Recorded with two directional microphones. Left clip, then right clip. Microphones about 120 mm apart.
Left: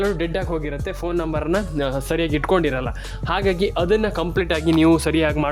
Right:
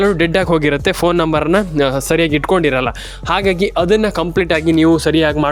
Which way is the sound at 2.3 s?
25° right (ahead or behind).